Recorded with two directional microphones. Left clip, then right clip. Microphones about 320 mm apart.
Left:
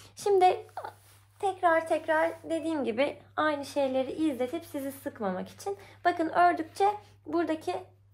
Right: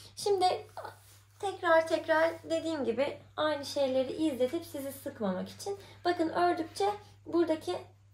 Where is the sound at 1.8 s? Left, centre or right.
Centre.